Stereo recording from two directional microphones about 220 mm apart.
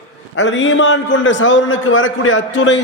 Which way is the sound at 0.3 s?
55° left (ahead or behind).